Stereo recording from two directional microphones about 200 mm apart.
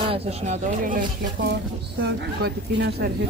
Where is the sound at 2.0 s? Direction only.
55° right (ahead or behind).